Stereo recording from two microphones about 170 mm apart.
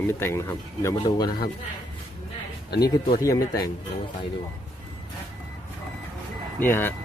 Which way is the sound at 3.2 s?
20° left (ahead or behind).